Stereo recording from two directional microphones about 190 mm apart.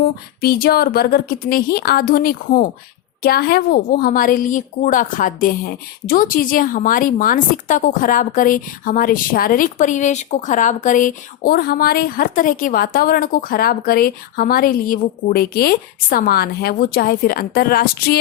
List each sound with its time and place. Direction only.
0.4 s a woman's voice: 55° left (ahead or behind)